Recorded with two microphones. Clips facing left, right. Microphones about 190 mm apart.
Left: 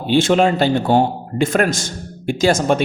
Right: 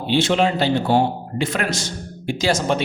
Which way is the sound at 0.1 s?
50° left (ahead or behind).